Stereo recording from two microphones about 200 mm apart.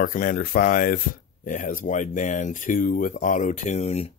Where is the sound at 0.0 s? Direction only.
45° left (ahead or behind).